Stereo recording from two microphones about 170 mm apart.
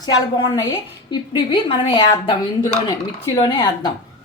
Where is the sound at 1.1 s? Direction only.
30° left (ahead or behind).